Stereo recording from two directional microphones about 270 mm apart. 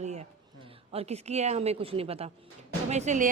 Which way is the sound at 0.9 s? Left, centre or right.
Right.